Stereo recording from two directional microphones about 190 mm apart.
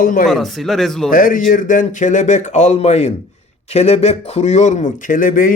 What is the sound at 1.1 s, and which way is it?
Speech, 45° left (ahead or behind).